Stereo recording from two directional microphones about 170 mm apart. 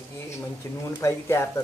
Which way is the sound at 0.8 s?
15° left (ahead or behind).